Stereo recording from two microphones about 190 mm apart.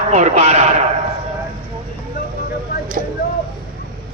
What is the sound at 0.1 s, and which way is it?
Speech, 35° right (ahead or behind).